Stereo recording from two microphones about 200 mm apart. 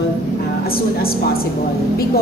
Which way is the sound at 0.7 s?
50° left (ahead or behind).